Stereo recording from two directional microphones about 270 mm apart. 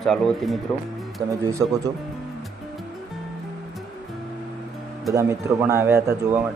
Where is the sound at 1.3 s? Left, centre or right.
Centre.